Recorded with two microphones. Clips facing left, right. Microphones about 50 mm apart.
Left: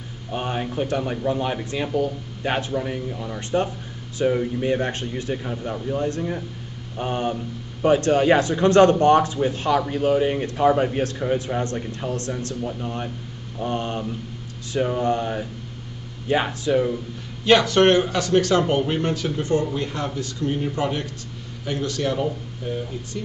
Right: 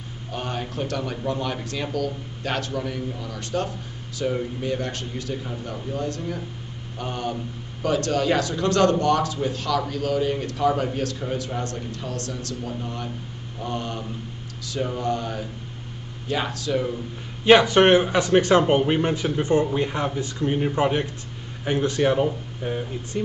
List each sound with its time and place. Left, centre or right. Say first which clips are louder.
0.3 s a man's voice: left 4 dB; left
17.5 s speech: right 1 dB; centre